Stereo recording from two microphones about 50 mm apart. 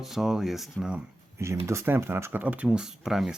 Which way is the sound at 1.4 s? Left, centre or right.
Right.